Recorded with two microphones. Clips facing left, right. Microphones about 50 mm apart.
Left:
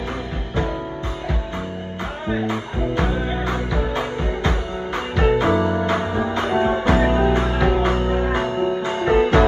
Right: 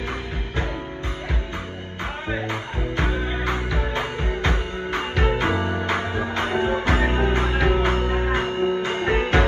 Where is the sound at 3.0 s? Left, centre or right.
Right.